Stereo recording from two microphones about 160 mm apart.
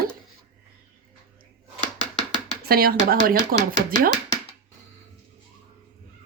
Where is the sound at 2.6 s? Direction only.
70° right (ahead or behind).